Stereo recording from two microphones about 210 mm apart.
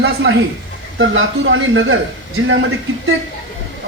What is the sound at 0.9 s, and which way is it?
A man's voice, 65° right (ahead or behind).